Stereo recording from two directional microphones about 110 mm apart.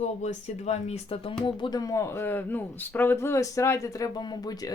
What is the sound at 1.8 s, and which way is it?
Speech, 30° left (ahead or behind).